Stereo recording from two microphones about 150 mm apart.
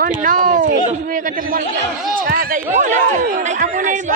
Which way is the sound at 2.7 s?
55° right (ahead or behind).